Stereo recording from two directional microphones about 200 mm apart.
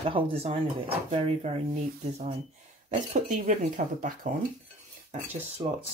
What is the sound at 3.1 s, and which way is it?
Speech, 40° right (ahead or behind).